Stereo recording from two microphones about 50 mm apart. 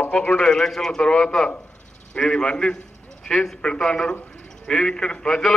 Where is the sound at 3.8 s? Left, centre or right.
Centre.